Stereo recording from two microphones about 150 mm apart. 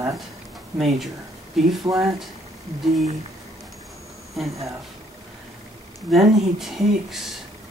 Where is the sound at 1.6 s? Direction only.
Centre (ahead or behind).